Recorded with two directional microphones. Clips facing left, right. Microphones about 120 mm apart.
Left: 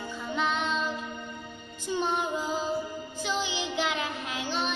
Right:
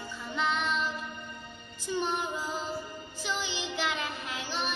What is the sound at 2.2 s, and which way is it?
Music, 20° left (ahead or behind).